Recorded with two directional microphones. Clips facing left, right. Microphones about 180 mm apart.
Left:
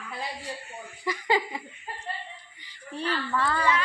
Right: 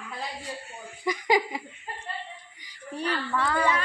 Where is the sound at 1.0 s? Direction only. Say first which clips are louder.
Right 2 dB; 15° right (ahead or behind).